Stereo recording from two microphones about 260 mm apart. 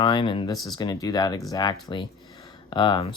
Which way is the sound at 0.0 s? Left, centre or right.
Centre.